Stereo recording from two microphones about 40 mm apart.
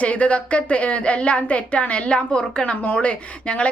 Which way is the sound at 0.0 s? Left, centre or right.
Left.